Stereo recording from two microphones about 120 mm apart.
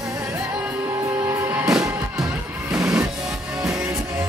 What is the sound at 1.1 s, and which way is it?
Music, 20° right (ahead or behind).